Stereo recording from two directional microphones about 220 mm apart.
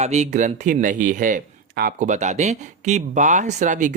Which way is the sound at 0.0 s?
30° right (ahead or behind).